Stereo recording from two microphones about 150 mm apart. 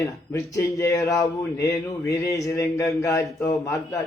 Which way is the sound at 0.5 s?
20° left (ahead or behind).